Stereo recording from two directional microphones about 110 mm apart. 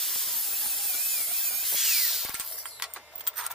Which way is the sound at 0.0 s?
Centre (ahead or behind).